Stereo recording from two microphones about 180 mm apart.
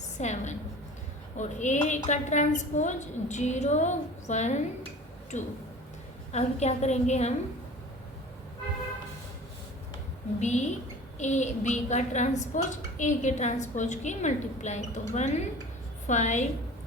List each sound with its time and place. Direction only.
0.2 s a woman's voice: 40° left (ahead or behind)
10.4 s a woman's voice: 40° left (ahead or behind)